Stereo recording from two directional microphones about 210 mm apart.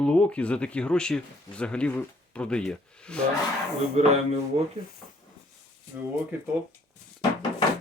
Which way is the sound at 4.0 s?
30° right (ahead or behind).